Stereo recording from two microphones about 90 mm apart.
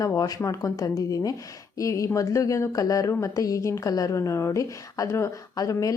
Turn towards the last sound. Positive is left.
turn(degrees=40)  # may be behind; listen again after turning